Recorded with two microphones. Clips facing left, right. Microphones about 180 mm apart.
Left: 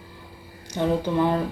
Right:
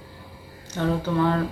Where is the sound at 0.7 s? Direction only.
15° left (ahead or behind).